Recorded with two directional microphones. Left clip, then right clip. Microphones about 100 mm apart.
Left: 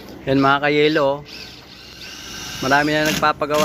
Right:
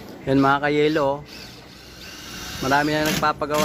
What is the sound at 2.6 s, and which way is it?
Speech, 5° left (ahead or behind).